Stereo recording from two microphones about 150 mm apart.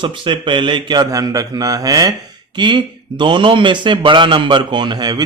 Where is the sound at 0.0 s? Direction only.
35° right (ahead or behind).